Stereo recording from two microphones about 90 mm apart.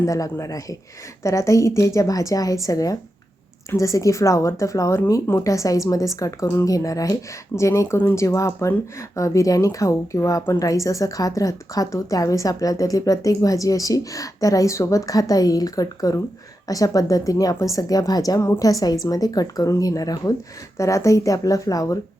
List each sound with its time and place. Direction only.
0.0 s a woman's voice: 35° left (ahead or behind)